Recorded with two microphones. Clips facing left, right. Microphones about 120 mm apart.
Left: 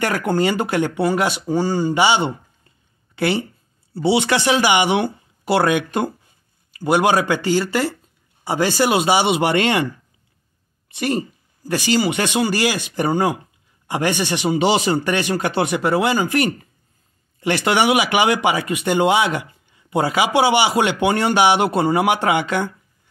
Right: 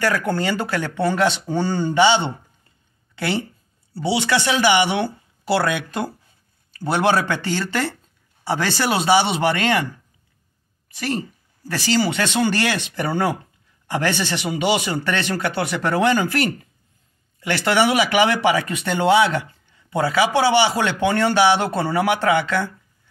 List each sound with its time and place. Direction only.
0.0 s speech: 20° left (ahead or behind)
3.9 s speech: 25° left (ahead or behind)
10.9 s speech: 20° left (ahead or behind)
14.5 s speech: 30° left (ahead or behind)
15.0 s speech: 15° left (ahead or behind)
15.8 s speech: 5° left (ahead or behind)
17.4 s speech: 20° left (ahead or behind)